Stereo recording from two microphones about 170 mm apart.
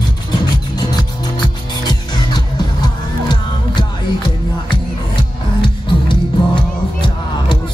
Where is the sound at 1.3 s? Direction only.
25° left (ahead or behind).